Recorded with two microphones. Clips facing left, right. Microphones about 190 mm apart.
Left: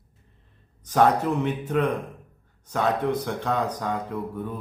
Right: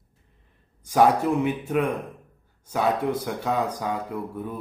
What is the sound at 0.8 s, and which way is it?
Speech, 10° right (ahead or behind).